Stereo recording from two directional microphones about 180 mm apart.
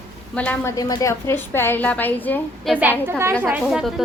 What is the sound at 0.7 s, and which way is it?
A woman's voice, 20° left (ahead or behind).